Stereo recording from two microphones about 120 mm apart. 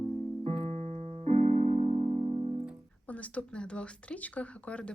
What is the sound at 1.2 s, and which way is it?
Keyboard, 70° right (ahead or behind).